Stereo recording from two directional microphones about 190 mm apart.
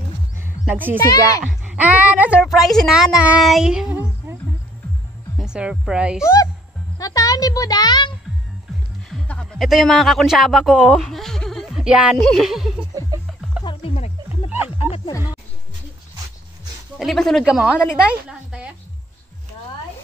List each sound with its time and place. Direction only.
0.7 s a child's voice: 10° right (ahead or behind)
4.3 s music: 10° right (ahead or behind)
5.4 s speech: 5° right (ahead or behind)
6.2 s speech: 15° left (ahead or behind)
7.0 s a sound: 20° left (ahead or behind)
9.1 s a man's voice: centre (ahead or behind)
13.7 s music: 30° left (ahead or behind)
14.8 s a sound: 30° left (ahead or behind)
17.0 s speech: centre (ahead or behind)
18.0 s a sound: 5° right (ahead or behind)